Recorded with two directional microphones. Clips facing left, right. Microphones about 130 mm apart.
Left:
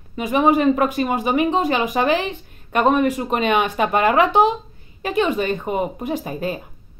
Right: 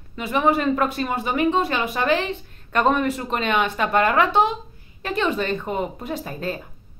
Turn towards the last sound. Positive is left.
turn(degrees=15)  # may be behind; listen again after turning